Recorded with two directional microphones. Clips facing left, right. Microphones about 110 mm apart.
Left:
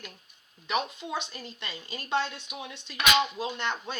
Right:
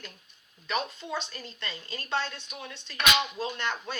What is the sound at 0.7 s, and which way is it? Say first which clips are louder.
A woman's voice: left 1 dB; 15° left (ahead or behind).